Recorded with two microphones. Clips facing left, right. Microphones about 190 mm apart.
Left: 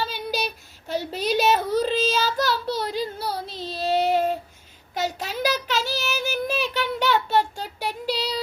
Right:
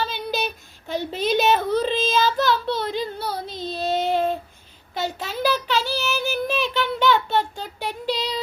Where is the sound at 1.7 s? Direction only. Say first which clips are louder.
Right 1 dB; 40° left (ahead or behind).